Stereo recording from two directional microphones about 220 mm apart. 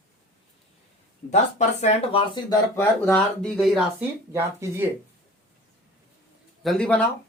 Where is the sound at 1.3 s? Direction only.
30° left (ahead or behind); by 3.8 s centre (ahead or behind).